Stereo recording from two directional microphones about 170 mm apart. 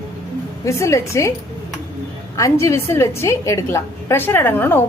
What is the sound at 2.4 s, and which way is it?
A woman's voice, 15° left (ahead or behind).